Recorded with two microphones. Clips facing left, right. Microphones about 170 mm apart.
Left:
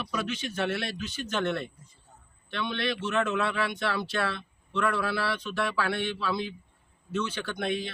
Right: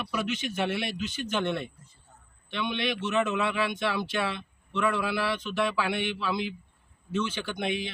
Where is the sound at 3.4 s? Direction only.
20° right (ahead or behind).